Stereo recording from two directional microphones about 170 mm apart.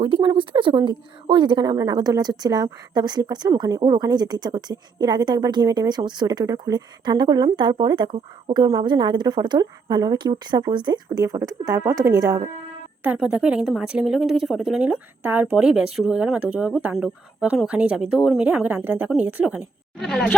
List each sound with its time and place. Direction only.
0.0 s a woman's voice: 30° right (ahead or behind)
13.0 s a woman's voice: 10° right (ahead or behind)